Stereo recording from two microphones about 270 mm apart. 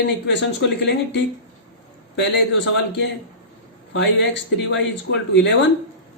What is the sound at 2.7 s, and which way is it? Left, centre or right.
Speech, left.